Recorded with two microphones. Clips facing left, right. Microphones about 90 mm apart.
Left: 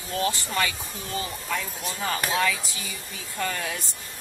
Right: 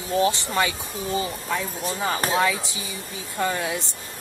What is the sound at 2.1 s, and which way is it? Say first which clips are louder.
Speech: right 3 dB; 35° right (ahead or behind).